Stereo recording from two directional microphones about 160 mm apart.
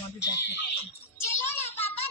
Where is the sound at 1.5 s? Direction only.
15° left (ahead or behind).